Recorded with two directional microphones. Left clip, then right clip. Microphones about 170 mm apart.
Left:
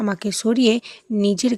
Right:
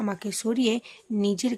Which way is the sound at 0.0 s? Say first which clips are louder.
Left 7 dB; 30° left (ahead or behind).